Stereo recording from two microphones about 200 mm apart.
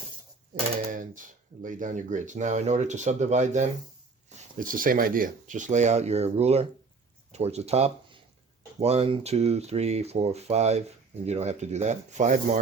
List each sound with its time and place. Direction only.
0.9 s speech: 40° right (ahead or behind)